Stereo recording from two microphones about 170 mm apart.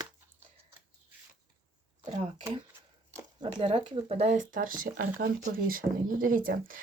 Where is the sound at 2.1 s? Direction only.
35° right (ahead or behind).